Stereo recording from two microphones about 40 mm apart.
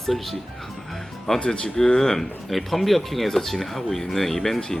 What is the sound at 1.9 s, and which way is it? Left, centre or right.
Speech, centre.